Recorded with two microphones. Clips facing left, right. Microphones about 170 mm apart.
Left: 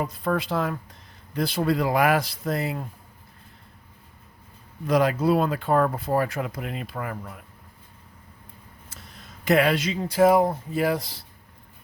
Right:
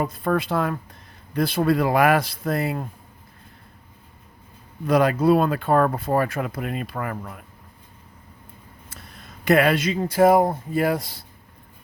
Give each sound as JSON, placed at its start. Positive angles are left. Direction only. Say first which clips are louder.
{"t": 0.0, "sound": "speech", "louder": "right 3 dB", "side_deg": -50}
{"t": 4.9, "sound": "speech", "louder": "right 3 dB", "side_deg": -55}
{"t": 8.9, "sound": "speech", "louder": "right 2 dB", "side_deg": -55}